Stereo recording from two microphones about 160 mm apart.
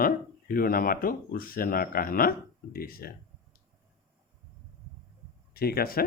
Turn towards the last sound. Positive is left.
turn(degrees=70)  # may be behind; listen again after turning